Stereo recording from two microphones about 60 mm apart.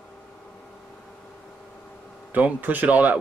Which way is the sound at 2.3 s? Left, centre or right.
Right.